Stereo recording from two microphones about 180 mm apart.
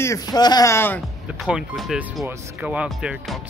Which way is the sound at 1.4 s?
Centre (ahead or behind).